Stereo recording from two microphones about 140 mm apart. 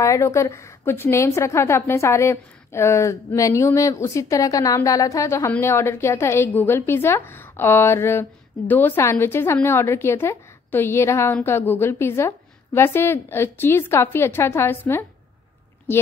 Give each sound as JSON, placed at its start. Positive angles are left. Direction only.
{"t": 0.0, "sound": "a woman's voice", "side_deg": 20}